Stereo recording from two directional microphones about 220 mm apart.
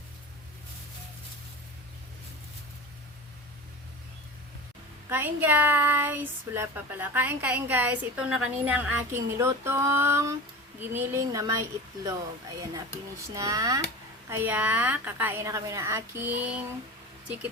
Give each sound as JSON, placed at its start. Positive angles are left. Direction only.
{"t": 5.0, "sound": "speech", "side_deg": -10}
{"t": 13.3, "sound": "speech", "side_deg": -15}